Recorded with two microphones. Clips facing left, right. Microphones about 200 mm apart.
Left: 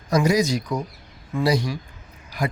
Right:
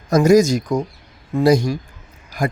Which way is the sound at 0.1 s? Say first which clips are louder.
Right 7 dB; 45° right (ahead or behind).